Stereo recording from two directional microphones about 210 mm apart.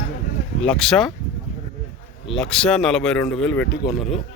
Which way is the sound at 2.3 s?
5° left (ahead or behind).